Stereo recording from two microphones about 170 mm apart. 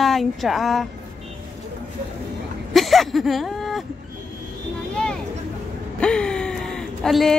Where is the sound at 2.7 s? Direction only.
Centre (ahead or behind).